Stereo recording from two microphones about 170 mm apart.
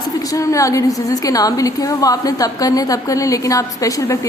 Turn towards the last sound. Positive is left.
turn(degrees=20)  # may be behind; listen again after turning